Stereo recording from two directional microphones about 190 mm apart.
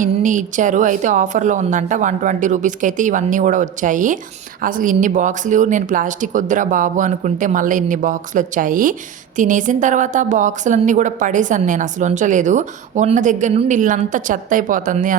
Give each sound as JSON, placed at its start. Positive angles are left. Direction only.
{"t": 0.0, "sound": "speech", "side_deg": -45}